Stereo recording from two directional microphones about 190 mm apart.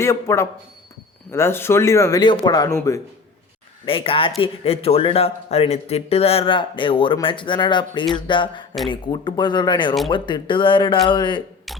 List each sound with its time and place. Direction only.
0.0 s a man's voice: 15° left (ahead or behind)
3.8 s speech: 30° left (ahead or behind)